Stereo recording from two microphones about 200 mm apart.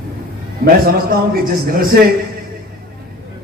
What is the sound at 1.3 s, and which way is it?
Speech, 45° right (ahead or behind).